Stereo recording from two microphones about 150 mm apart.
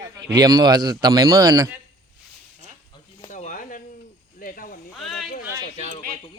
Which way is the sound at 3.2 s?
60° left (ahead or behind).